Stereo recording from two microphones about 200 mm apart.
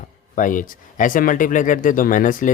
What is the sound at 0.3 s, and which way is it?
Speech, 40° left (ahead or behind).